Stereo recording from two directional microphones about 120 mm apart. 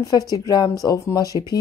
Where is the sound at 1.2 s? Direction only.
30° right (ahead or behind).